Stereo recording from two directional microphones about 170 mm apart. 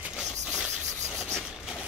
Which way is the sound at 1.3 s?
5° right (ahead or behind).